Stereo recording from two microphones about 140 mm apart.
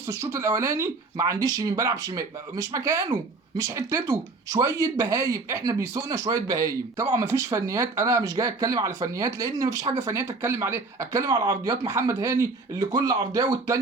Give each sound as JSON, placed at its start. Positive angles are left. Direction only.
{"t": 0.1, "sound": "speech", "side_deg": -20}